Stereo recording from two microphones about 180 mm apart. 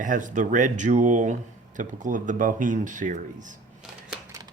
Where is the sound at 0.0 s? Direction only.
45° right (ahead or behind).